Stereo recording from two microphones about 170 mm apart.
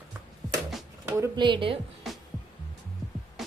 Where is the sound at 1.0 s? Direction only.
15° right (ahead or behind).